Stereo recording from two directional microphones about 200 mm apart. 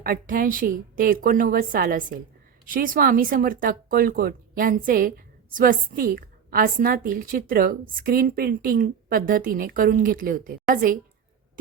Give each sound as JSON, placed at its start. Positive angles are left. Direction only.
{"t": 0.0, "sound": "speech", "side_deg": -45}